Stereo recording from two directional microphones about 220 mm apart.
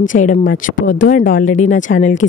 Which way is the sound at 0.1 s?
35° left (ahead or behind).